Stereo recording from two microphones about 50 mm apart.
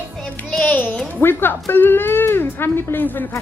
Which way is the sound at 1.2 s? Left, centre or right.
Left.